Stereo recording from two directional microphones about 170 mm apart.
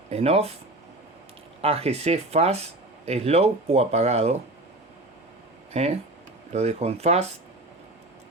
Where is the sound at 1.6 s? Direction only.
35° right (ahead or behind).